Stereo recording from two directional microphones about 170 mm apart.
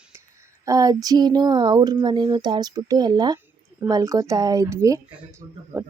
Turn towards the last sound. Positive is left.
turn(degrees=-20)  # may be behind; listen again after turning